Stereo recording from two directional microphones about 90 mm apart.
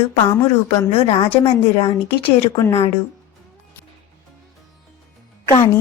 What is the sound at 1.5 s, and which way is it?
Speech, 90° left.